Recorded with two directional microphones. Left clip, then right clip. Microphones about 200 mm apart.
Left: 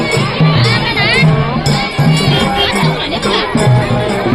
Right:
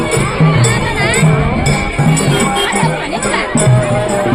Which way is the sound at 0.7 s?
20° right (ahead or behind).